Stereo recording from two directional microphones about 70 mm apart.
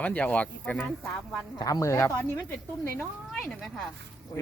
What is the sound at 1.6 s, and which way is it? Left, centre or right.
Speech, left.